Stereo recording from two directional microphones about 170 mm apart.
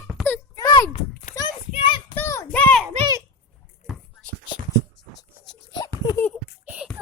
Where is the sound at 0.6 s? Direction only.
25° left (ahead or behind).